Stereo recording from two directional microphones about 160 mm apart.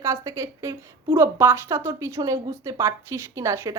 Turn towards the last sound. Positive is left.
turn(degrees=-20)  # may be behind; listen again after turning